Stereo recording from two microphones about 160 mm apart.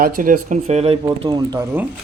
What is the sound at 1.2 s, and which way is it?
Speech, 25° right (ahead or behind).